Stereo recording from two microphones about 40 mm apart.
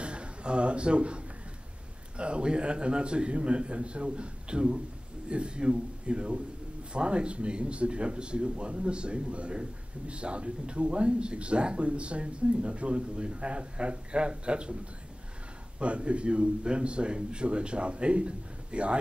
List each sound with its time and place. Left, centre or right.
0.0 s a man's voice: right
15.8 s speech: right